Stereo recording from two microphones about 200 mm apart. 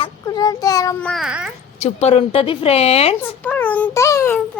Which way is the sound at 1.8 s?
30° left (ahead or behind).